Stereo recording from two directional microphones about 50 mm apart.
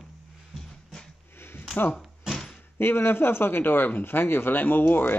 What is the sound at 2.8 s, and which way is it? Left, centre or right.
Speech, left.